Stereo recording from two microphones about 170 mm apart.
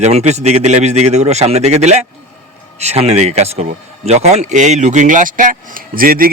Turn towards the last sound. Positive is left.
turn(degrees=-55)  # may be behind; listen again after turning